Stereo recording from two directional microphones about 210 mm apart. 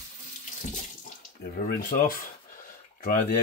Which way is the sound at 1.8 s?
45° left (ahead or behind).